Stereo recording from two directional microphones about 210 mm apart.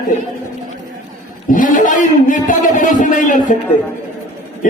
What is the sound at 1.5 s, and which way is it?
Speech, 40° left (ahead or behind).